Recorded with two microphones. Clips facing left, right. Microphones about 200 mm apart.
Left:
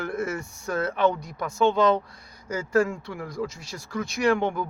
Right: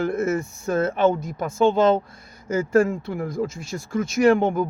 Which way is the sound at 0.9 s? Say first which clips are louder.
Right 4 dB; 25° right (ahead or behind).